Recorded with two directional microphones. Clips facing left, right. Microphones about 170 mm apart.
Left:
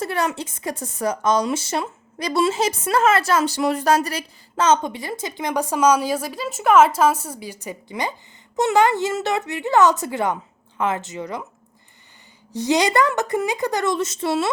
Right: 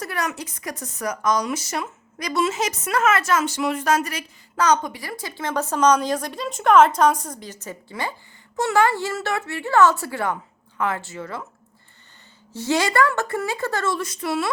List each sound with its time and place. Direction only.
0.0 s a woman's voice: 25° left (ahead or behind)
12.5 s speech: 15° left (ahead or behind)